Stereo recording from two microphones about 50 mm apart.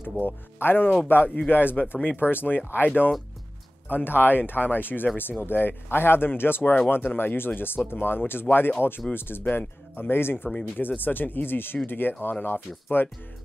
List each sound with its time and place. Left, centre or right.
0.2 s speech: left
3.9 s speech: left